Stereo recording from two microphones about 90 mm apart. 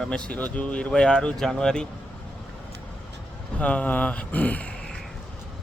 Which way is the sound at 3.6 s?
15° left (ahead or behind).